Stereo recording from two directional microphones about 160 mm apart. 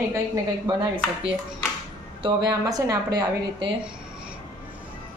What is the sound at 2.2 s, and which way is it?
Speech, 25° right (ahead or behind).